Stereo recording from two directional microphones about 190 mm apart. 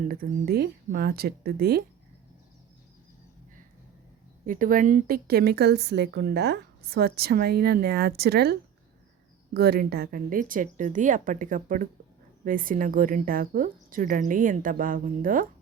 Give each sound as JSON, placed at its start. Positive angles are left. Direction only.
{"t": 0.1, "sound": "a woman's voice", "side_deg": -55}
{"t": 4.4, "sound": "a woman's voice", "side_deg": -45}